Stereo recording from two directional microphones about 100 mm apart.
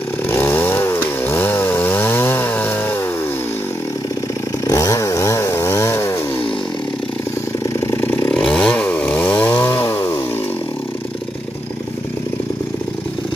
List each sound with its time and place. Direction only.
0.3 s chainsaw: 25° left (ahead or behind)
4.6 s chainsaw: 35° left (ahead or behind)
7.8 s motorcycle: 20° left (ahead or behind)
8.3 s chainsaw: 10° left (ahead or behind); by 10.2 s 25° left (ahead or behind)